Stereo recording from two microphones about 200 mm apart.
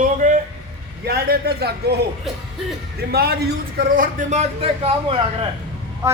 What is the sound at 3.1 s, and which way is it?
Speech, 50° right (ahead or behind).